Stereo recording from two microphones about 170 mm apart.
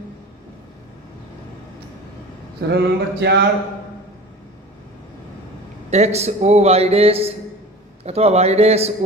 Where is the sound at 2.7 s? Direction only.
80° right.